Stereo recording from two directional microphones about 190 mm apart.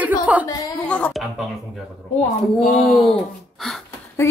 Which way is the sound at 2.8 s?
Centre (ahead or behind).